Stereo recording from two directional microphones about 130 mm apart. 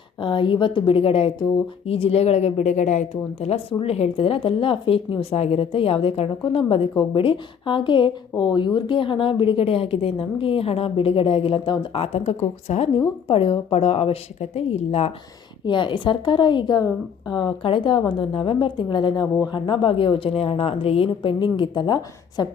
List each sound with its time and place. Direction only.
0.2 s a woman's voice: 40° left (ahead or behind); by 12.9 s 55° left (ahead or behind)
13.2 s speech: 45° left (ahead or behind)
15.6 s a woman's voice: 40° left (ahead or behind)